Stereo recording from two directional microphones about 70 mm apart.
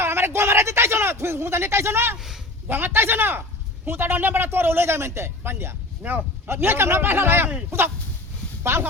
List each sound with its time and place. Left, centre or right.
0.0 s speech: right
2.1 s a man's voice: centre
2.6 s speech: right
6.0 s speech: right
6.5 s speech: right
8.6 s speech: right